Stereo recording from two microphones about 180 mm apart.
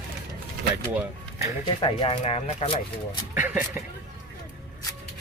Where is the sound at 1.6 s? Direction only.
25° left (ahead or behind).